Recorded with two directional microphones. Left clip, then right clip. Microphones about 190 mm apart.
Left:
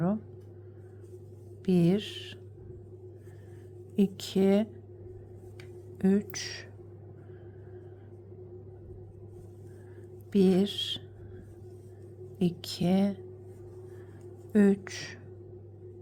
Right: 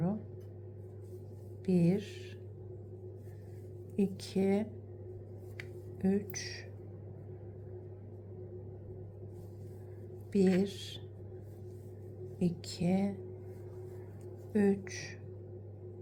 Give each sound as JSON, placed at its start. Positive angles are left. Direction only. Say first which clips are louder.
{"t": 1.6, "sound": "a woman's voice", "louder": "left 5 dB", "side_deg": 20}
{"t": 3.9, "sound": "a woman's voice", "louder": "left 5 dB", "side_deg": 20}
{"t": 6.0, "sound": "a woman's voice", "louder": "left 5 dB", "side_deg": 25}
{"t": 10.3, "sound": "a woman's voice", "louder": "left 5 dB", "side_deg": 20}
{"t": 12.4, "sound": "a woman's voice", "louder": "left 5 dB", "side_deg": 20}
{"t": 14.5, "sound": "a woman's voice", "louder": "left 5 dB", "side_deg": 25}